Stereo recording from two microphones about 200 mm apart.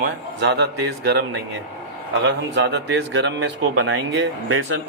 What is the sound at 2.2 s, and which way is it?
A man's voice, 60° right (ahead or behind).